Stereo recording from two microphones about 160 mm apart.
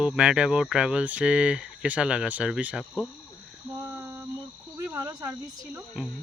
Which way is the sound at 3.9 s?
15° right (ahead or behind).